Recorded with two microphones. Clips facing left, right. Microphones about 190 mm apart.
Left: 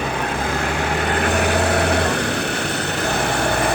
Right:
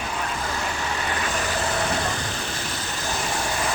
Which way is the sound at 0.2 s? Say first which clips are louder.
Left 6 dB; 60° left (ahead or behind).